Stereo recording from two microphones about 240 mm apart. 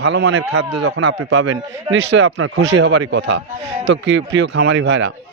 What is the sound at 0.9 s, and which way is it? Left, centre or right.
Speech, right.